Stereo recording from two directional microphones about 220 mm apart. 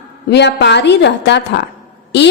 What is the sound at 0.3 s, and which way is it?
A woman's voice, 50° left (ahead or behind).